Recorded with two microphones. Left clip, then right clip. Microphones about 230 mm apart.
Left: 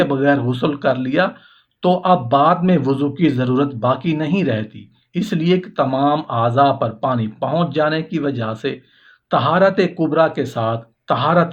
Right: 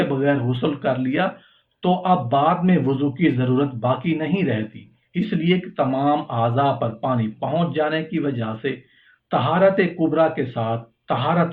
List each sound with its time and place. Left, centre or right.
0.0 s speech: left